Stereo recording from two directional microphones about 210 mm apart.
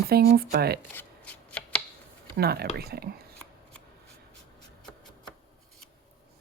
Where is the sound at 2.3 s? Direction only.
50° right (ahead or behind).